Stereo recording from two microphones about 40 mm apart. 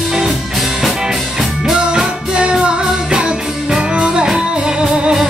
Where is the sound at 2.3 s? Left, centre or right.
Right.